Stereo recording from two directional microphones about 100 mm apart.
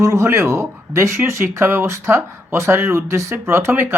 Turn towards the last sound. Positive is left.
turn(degrees=-25)  # may be behind; listen again after turning